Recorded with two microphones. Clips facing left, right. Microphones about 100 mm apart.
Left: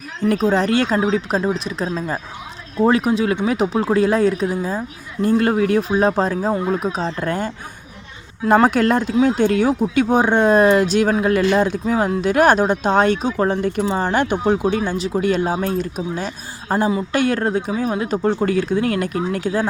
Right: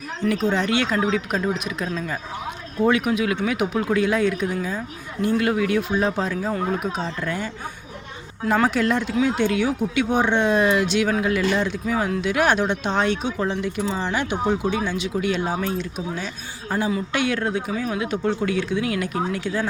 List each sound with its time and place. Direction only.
0.3 s speech: 40° left (ahead or behind)